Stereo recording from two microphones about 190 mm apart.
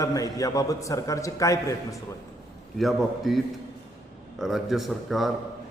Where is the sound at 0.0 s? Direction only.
15° left (ahead or behind).